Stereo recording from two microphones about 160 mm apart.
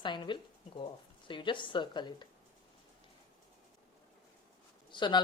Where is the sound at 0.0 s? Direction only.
30° left (ahead or behind).